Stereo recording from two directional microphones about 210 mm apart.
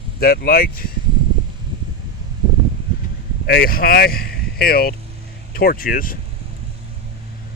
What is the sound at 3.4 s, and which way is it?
Speech, 45° left (ahead or behind).